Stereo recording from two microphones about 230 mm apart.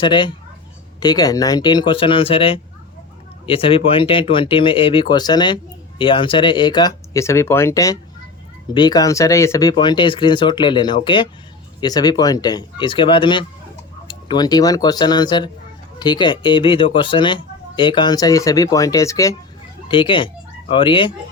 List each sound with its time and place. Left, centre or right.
0.0 s speech: left